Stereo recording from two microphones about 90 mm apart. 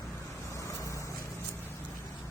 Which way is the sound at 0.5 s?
35° left (ahead or behind).